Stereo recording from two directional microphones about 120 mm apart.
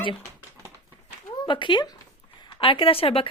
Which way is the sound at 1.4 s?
40° left (ahead or behind).